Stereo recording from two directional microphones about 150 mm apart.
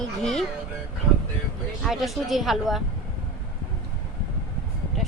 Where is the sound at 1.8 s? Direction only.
Centre (ahead or behind).